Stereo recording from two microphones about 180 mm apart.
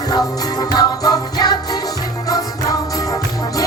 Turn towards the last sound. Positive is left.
turn(degrees=20)  # may be behind; listen again after turning